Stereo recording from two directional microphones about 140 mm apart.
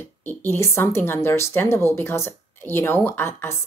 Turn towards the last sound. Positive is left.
turn(degrees=15)  # may be behind; listen again after turning